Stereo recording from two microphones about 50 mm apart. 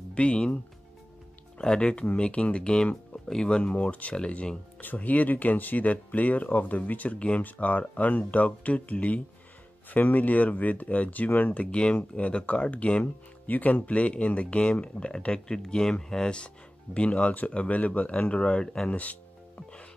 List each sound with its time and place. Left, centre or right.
0.1 s speech: left
1.6 s speech: centre
4.7 s speech: left; by 16.4 s centre
16.9 s speech: left